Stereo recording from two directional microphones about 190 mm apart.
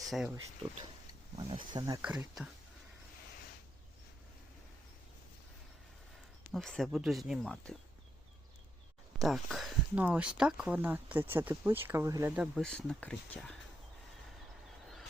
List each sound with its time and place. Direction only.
0.1 s speech: centre (ahead or behind)
1.4 s speech: 30° right (ahead or behind)
6.5 s speech: centre (ahead or behind)
9.1 s speech: centre (ahead or behind); by 12.5 s 15° right (ahead or behind)
12.5 s speech: 5° left (ahead or behind)